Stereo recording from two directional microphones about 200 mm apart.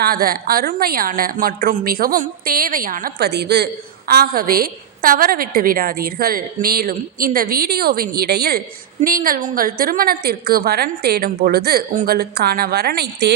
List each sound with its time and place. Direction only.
0.0 s a woman's voice: 50° right (ahead or behind)